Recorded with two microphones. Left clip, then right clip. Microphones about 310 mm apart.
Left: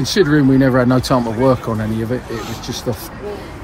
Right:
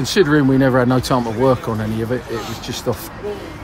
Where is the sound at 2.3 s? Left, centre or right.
Centre.